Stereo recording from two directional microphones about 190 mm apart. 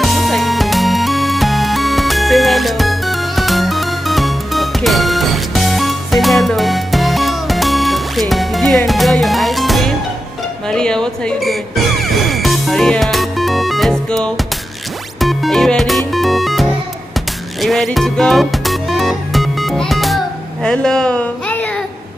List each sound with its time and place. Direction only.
0.0 s music: centre (ahead or behind)